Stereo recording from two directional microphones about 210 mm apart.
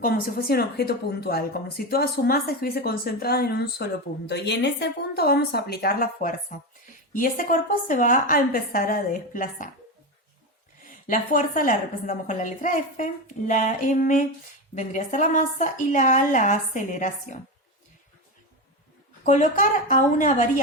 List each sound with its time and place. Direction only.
0.0 s a woman's voice: 45° left (ahead or behind)
10.8 s a woman's voice: 40° left (ahead or behind)
19.2 s a woman's voice: 35° left (ahead or behind)